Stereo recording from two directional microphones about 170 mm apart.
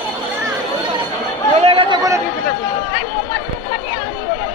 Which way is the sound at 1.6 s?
30° right (ahead or behind).